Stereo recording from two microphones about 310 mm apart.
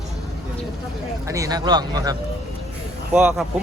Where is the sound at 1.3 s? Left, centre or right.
Centre.